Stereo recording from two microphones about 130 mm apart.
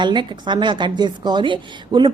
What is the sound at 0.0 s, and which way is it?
A woman's voice, 35° right (ahead or behind).